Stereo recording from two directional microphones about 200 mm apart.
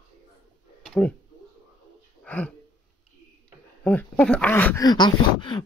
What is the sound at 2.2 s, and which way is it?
Speech, 10° left (ahead or behind).